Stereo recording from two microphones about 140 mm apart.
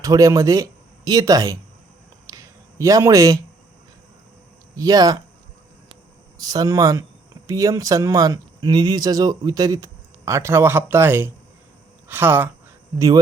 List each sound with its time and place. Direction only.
0.0 s speech: 25° right (ahead or behind)
2.2 s a sound: 25° right (ahead or behind)
4.8 s speech: 25° right (ahead or behind)
6.4 s speech: 25° right (ahead or behind)